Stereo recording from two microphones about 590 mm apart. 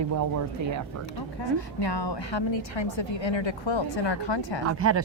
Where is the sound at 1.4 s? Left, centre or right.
Left.